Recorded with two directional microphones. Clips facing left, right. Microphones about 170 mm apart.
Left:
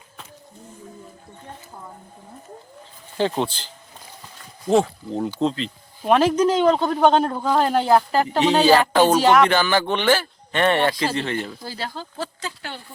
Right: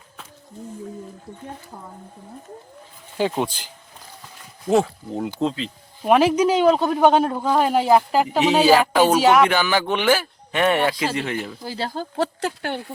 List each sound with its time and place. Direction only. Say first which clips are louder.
3.2 s speech: even; 10° right (ahead or behind)
11.9 s speech: right 7 dB; 65° right (ahead or behind)